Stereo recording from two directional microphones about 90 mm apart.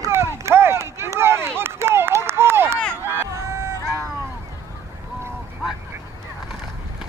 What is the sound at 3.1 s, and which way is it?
Hubbub, 35° right (ahead or behind).